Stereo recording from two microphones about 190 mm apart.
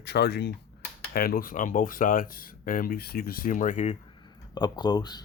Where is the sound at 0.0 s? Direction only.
60° left (ahead or behind); by 3.9 s 40° left (ahead or behind).